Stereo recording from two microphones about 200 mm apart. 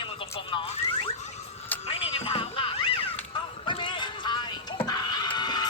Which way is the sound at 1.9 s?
30° left (ahead or behind).